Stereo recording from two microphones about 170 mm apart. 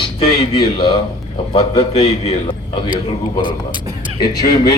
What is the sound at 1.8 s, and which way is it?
A man's voice, 40° left (ahead or behind).